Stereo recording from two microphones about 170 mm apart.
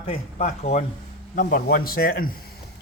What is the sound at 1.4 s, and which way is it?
Speech, 55° left (ahead or behind).